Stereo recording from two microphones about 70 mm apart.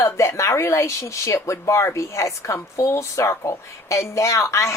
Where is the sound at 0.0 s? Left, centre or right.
Left.